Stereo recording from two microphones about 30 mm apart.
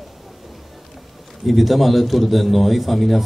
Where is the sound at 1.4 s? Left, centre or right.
Centre.